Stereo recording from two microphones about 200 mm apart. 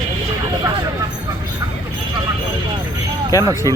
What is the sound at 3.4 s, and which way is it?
Speech, 15° right (ahead or behind).